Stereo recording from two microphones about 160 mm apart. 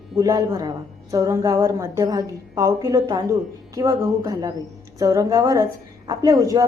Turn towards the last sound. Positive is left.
turn(degrees=-20)  # may be behind; listen again after turning